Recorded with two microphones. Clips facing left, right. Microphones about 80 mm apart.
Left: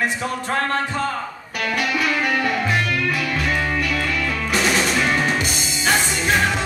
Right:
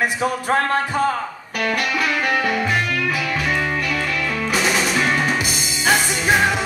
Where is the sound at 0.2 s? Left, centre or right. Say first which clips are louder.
Right 4 dB; centre.